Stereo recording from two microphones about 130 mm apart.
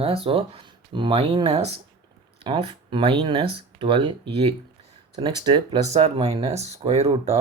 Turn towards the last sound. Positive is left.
turn(degrees=-50)  # may be behind; listen again after turning